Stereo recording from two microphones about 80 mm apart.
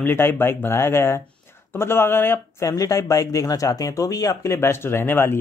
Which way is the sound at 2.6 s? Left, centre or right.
Left.